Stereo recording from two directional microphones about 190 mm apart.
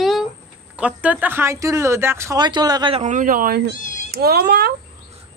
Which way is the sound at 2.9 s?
40° right (ahead or behind).